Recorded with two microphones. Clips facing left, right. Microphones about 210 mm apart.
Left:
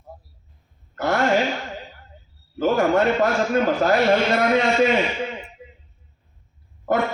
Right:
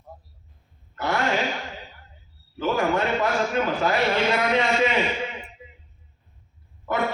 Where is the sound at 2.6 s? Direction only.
45° left (ahead or behind).